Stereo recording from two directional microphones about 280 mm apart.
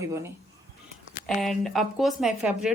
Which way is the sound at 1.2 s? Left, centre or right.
Centre.